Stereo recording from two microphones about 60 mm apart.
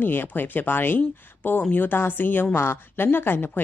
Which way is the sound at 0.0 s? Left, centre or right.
Left.